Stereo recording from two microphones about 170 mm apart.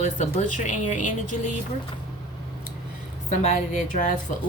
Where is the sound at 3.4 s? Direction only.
45° left (ahead or behind).